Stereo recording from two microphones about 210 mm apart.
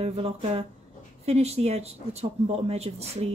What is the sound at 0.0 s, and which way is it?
Speech, 30° right (ahead or behind).